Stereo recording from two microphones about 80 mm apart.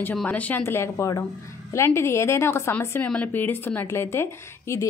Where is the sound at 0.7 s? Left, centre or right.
Left.